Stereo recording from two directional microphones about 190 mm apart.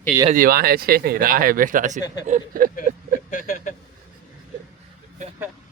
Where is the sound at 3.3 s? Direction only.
45° left (ahead or behind).